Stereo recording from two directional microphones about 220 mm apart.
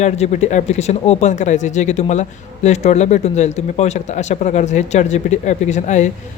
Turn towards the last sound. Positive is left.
turn(degrees=35)  # may be behind; listen again after turning